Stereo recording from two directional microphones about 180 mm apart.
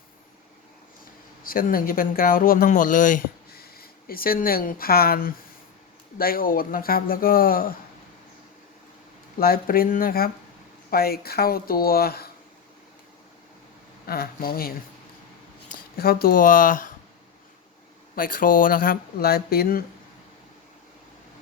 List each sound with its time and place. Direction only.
1.5 s speech: 50° left (ahead or behind)
9.4 s speech: 55° left (ahead or behind)
14.1 s speech: 55° left (ahead or behind)
15.7 s speech: 60° left (ahead or behind)
18.1 s speech: 50° left (ahead or behind)